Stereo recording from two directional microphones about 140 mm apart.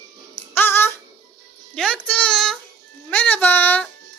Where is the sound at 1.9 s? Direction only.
10° left (ahead or behind).